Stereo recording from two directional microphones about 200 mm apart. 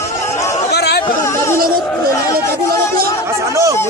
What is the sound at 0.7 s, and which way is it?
Chatter, 55° left (ahead or behind).